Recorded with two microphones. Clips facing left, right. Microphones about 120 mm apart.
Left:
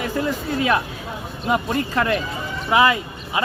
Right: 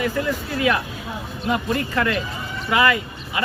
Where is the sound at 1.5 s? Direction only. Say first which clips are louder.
Left 1 dB; 25° left (ahead or behind).